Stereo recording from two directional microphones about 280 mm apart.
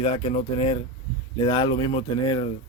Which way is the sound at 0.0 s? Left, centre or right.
Left.